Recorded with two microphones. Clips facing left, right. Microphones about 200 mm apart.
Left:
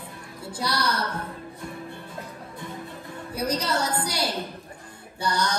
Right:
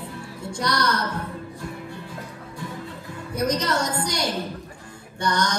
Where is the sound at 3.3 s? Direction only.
10° left (ahead or behind).